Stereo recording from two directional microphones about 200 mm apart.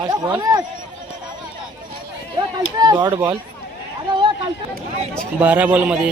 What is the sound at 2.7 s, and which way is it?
Speech, 20° right (ahead or behind).